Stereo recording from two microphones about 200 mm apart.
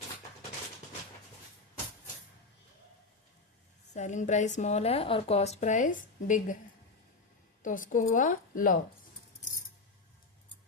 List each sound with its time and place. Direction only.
3.9 s speech: 35° left (ahead or behind)
7.6 s speech: 40° left (ahead or behind)